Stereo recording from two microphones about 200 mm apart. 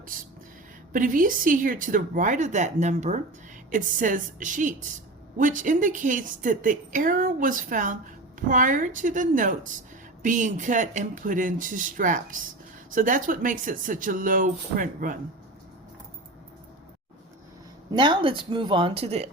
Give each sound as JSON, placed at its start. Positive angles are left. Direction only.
{"t": 0.9, "sound": "a woman's voice", "side_deg": -40}
{"t": 17.9, "sound": "speech", "side_deg": -25}